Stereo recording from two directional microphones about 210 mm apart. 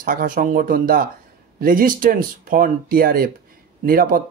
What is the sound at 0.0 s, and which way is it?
Speech, 40° right (ahead or behind).